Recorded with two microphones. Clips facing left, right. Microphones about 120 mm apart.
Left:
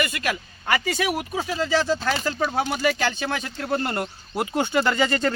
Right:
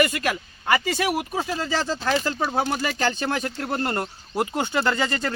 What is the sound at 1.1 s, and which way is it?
Speech, 10° right (ahead or behind).